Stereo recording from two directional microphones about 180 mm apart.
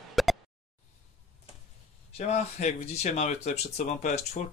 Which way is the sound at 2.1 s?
40° left (ahead or behind).